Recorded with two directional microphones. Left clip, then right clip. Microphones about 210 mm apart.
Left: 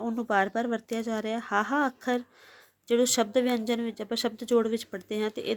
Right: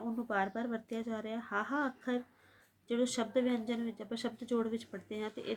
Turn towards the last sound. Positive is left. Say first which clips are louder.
# left 10 dB
turn(degrees=50)  # may be behind; listen again after turning